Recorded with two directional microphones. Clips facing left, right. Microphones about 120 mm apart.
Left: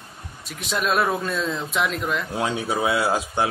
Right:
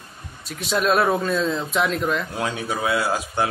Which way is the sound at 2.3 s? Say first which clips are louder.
Left 2 dB; 20° left (ahead or behind).